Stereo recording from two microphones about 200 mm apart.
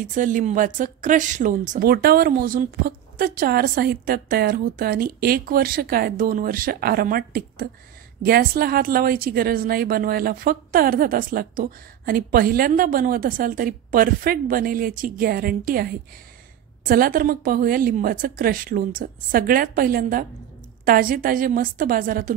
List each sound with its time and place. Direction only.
0.1 s speech: 40° right (ahead or behind)